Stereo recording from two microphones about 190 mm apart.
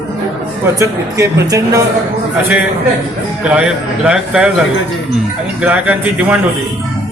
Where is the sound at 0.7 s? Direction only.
15° right (ahead or behind).